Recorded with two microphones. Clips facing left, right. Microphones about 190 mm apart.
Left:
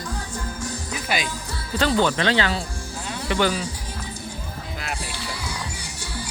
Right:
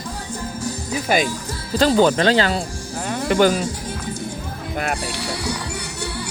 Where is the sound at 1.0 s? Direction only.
45° right (ahead or behind).